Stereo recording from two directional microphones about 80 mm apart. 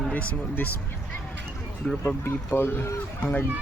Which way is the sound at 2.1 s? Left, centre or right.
Left.